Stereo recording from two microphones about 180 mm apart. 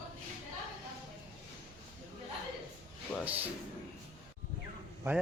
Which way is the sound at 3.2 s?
10° right (ahead or behind).